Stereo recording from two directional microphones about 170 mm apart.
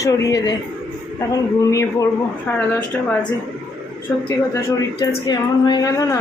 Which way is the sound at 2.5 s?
10° left (ahead or behind).